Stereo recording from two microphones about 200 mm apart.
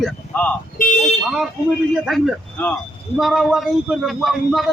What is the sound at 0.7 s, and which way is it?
Car alarm, 40° left (ahead or behind).